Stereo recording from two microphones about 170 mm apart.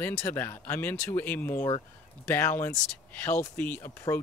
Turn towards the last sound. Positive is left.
turn(degrees=15)  # may be behind; listen again after turning